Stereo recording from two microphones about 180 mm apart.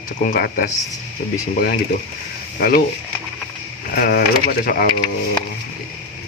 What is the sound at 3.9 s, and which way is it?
Speech, 55° left (ahead or behind).